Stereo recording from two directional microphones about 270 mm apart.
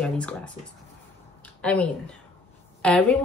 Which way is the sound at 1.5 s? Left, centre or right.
Centre.